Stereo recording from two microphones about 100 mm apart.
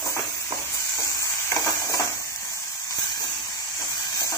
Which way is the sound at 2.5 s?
35° left (ahead or behind).